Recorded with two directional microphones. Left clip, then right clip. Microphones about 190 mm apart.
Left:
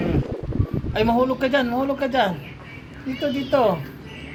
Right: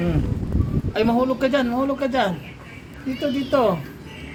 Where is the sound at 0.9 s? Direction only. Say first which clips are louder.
Left 1 dB; 5° left (ahead or behind).